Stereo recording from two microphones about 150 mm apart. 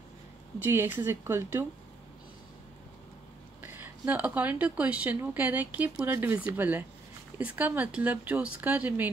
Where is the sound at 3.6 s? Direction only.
15° right (ahead or behind).